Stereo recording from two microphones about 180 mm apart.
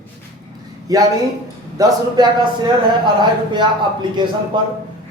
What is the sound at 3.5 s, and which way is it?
Speech, 25° right (ahead or behind).